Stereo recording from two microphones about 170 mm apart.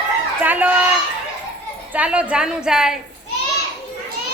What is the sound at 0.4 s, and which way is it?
Speech, 10° right (ahead or behind).